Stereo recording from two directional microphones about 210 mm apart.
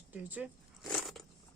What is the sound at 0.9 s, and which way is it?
Biting, centre (ahead or behind).